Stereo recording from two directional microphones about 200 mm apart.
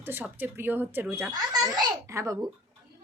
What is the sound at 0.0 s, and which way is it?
A woman's voice, 10° right (ahead or behind).